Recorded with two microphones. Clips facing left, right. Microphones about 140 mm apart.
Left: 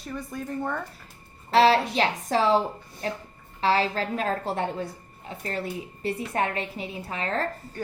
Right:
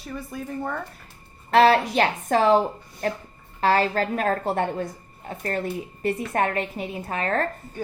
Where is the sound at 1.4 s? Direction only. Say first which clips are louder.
Right 2 dB; 55° right (ahead or behind).